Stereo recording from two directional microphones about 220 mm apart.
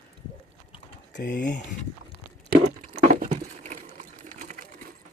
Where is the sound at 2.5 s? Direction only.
30° right (ahead or behind).